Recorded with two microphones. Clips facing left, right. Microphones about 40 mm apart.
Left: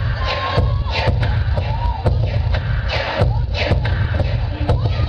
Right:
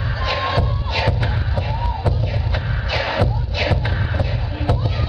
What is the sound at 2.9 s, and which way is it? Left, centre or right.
Music, centre.